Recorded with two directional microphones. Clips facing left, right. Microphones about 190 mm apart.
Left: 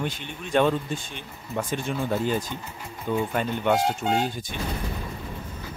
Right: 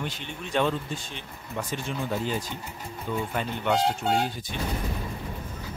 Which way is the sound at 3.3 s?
50° left (ahead or behind).